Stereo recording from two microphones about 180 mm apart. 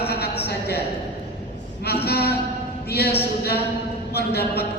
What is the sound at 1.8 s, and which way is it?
Speech, 60° left (ahead or behind).